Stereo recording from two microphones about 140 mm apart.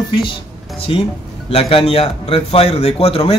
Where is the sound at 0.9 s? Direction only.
40° left (ahead or behind).